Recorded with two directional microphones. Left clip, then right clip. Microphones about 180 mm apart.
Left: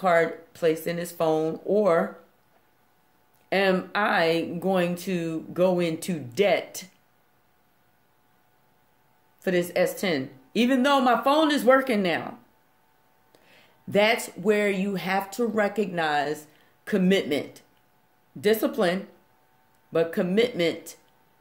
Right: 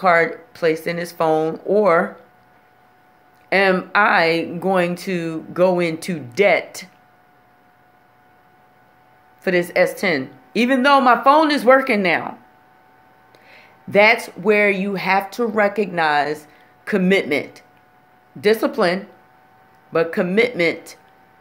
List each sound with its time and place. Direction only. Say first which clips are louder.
0.0 s speech: right 6 dB; 15° left (ahead or behind)
3.4 s speech: right 7 dB; 15° left (ahead or behind)
9.4 s speech: right 7 dB; 15° left (ahead or behind)
13.5 s speech: right 7 dB; 15° left (ahead or behind)